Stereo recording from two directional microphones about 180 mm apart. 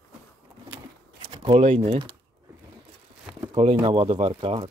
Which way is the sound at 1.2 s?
25° right (ahead or behind).